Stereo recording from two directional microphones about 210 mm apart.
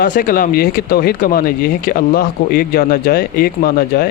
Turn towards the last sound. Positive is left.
turn(degrees=45)  # may be behind; listen again after turning